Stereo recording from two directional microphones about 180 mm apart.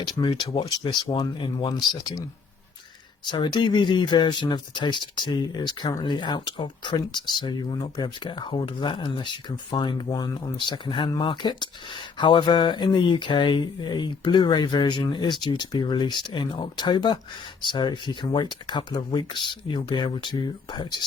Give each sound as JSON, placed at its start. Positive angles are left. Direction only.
{"t": 0.2, "sound": "speech", "side_deg": 25}
{"t": 3.2, "sound": "speech", "side_deg": 25}